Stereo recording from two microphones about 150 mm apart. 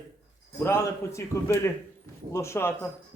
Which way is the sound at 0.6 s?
15° left (ahead or behind).